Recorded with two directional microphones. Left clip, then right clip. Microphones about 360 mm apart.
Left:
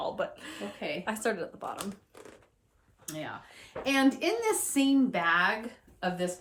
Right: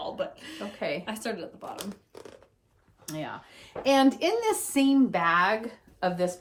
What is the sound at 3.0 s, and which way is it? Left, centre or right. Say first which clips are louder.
Speech: right 3 dB; right.